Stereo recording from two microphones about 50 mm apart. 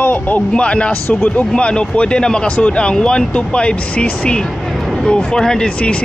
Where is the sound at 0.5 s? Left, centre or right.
Left.